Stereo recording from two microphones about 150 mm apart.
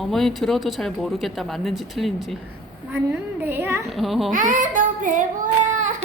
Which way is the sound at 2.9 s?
15° right (ahead or behind).